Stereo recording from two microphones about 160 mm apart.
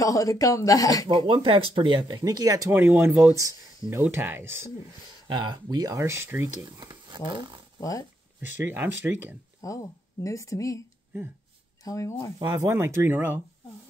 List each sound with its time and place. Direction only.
0.0 s speech: 20° left (ahead or behind)
1.0 s speech: 30° right (ahead or behind); by 4.6 s 15° right (ahead or behind)
5.3 s speech: 25° right (ahead or behind)
8.4 s speech: 10° right (ahead or behind)
9.6 s speech: 20° left (ahead or behind)
11.8 s speech: 20° left (ahead or behind)
12.4 s speech: 20° right (ahead or behind)